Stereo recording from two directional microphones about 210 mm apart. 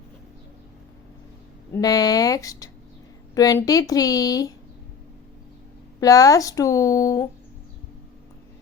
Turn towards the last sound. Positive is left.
turn(degrees=15)  # may be behind; listen again after turning